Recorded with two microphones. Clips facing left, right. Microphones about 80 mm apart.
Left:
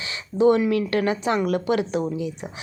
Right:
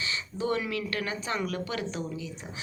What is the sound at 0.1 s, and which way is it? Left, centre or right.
A woman's voice, left.